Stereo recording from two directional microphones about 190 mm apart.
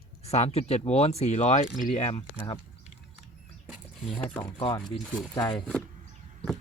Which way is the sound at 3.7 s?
Centre (ahead or behind).